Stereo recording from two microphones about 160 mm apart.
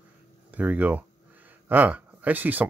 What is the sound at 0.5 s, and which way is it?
Speech, 10° right (ahead or behind).